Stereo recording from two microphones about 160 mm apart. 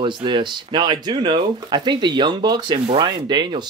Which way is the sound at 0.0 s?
30° right (ahead or behind).